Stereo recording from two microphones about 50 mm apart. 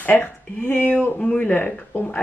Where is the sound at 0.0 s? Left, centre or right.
Left.